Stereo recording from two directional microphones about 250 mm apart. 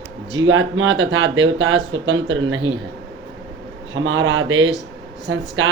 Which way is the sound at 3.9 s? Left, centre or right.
Right.